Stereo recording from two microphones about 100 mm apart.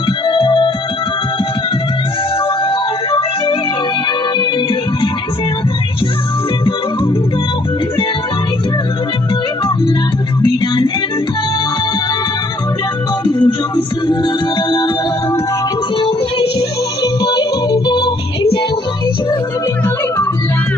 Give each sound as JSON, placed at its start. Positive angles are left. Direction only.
{"t": 0.3, "sound": "music", "side_deg": 55}
{"t": 3.1, "sound": "music", "side_deg": 60}
{"t": 13.2, "sound": "music", "side_deg": 50}
{"t": 16.0, "sound": "music", "side_deg": 60}
{"t": 17.0, "sound": "music", "side_deg": 45}